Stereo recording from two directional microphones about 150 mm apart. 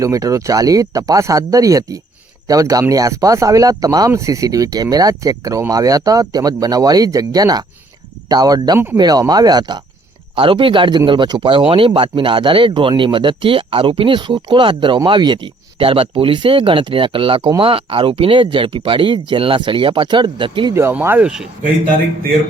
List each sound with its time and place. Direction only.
0.0 s speech: 20° right (ahead or behind)
20.7 s speech: 15° right (ahead or behind)